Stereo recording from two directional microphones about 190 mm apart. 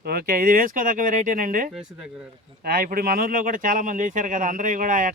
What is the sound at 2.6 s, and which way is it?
Speech, 50° right (ahead or behind).